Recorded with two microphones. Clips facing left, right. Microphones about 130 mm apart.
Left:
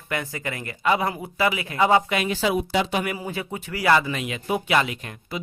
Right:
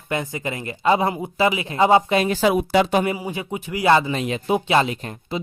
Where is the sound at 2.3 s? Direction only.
50° right (ahead or behind).